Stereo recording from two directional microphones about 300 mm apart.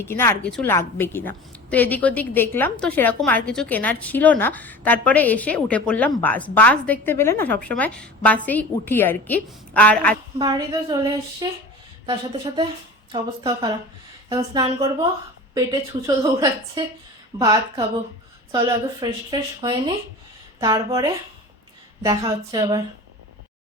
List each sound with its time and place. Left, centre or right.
0.0 s a woman's voice: centre
10.3 s a woman's voice: centre